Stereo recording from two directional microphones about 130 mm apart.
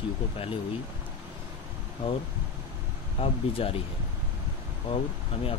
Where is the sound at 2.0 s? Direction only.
40° left (ahead or behind).